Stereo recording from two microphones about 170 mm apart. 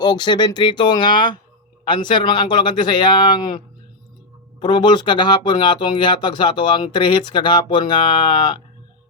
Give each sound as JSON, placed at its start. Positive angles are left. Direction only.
{"t": 0.0, "sound": "speech", "side_deg": 25}
{"t": 4.6, "sound": "speech", "side_deg": 25}